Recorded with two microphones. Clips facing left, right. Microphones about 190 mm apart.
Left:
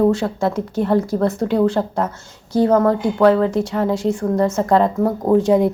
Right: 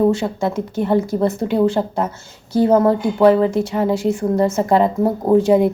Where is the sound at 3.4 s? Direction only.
5° right (ahead or behind).